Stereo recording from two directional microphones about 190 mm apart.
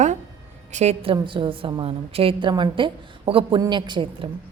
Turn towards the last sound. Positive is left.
turn(degrees=-25)  # may be behind; listen again after turning